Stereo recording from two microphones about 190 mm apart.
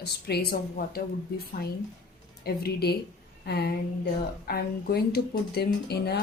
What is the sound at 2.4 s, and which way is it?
Speech, 55° left (ahead or behind).